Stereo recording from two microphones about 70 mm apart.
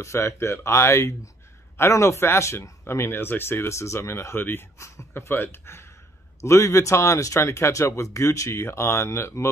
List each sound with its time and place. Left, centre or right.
0.0 s speech: left